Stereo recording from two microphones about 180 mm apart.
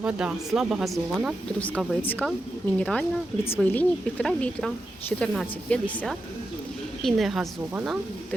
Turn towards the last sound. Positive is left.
turn(degrees=-5)  # may be behind; listen again after turning